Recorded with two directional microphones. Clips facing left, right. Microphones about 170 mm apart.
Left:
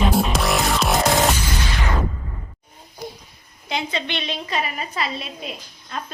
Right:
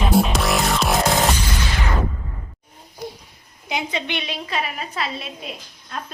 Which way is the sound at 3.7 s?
15° right (ahead or behind).